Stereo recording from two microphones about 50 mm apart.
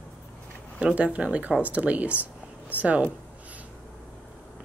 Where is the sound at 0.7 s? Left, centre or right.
Right.